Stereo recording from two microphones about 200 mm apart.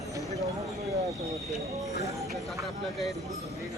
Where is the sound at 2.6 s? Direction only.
Centre (ahead or behind).